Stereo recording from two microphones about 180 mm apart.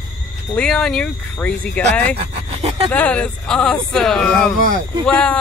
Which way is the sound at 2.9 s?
10° left (ahead or behind).